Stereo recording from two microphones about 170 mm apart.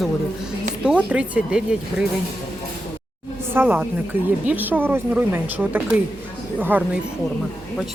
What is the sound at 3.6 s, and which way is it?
Speech, 10° right (ahead or behind).